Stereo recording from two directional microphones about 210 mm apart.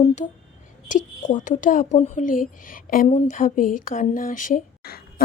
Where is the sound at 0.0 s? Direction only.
35° left (ahead or behind).